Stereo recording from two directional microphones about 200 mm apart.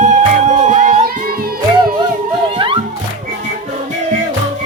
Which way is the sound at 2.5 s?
25° right (ahead or behind).